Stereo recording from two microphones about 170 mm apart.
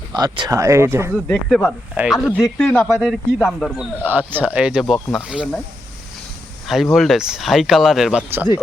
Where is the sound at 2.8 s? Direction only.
5° right (ahead or behind).